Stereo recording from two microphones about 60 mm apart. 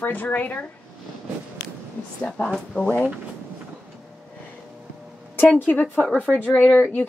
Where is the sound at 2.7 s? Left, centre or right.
Left.